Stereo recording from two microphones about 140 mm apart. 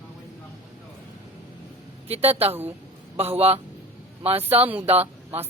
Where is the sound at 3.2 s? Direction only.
45° right (ahead or behind).